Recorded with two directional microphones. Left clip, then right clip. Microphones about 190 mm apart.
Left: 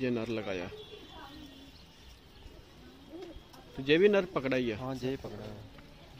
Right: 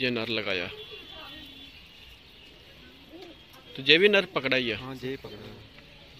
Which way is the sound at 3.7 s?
Centre (ahead or behind).